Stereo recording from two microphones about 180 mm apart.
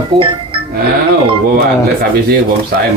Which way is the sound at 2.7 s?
60° right (ahead or behind).